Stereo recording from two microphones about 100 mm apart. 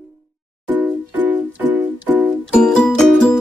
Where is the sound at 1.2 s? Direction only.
20° right (ahead or behind).